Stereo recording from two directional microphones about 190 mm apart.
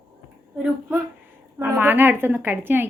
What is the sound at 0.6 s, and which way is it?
A woman's voice, 10° right (ahead or behind).